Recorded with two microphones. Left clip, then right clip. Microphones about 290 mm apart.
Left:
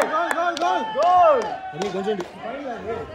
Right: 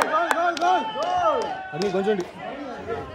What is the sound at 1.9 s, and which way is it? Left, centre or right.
Speech, centre.